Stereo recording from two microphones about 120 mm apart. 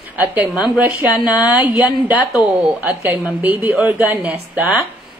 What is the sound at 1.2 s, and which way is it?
Speech, 35° left (ahead or behind).